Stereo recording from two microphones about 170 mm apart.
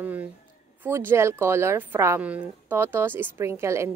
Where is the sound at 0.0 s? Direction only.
10° right (ahead or behind).